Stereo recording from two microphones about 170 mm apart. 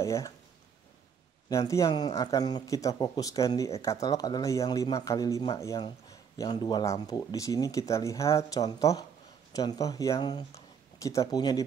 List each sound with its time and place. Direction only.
0.0 s speech: 15° left (ahead or behind)
1.5 s speech: 20° left (ahead or behind)